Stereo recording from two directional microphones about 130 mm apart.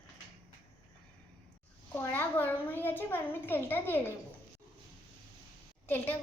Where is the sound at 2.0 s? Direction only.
15° left (ahead or behind).